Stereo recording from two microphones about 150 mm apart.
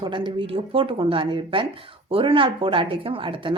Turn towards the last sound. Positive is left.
turn(degrees=-35)  # may be behind; listen again after turning